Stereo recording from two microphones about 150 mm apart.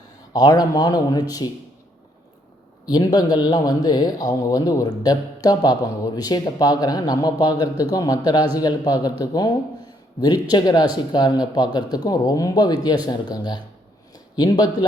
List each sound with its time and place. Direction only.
0.3 s a man's voice: 25° left (ahead or behind)
2.8 s a man's voice: 25° left (ahead or behind)